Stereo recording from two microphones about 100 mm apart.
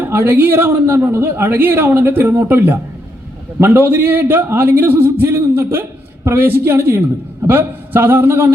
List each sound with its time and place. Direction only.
0.0 s a man's voice: 25° right (ahead or behind)